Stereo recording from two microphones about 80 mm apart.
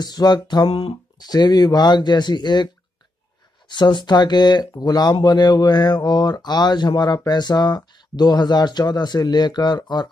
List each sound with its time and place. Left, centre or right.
0.0 s speech: left